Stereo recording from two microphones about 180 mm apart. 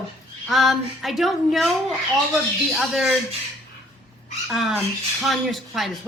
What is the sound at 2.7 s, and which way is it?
Speech, centre (ahead or behind).